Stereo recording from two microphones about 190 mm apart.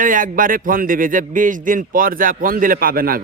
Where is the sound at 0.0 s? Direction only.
45° right (ahead or behind).